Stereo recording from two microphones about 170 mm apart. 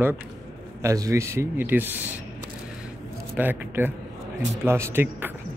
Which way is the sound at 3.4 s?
10° right (ahead or behind).